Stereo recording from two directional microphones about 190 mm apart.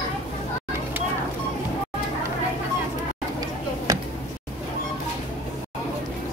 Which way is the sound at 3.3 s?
15° right (ahead or behind).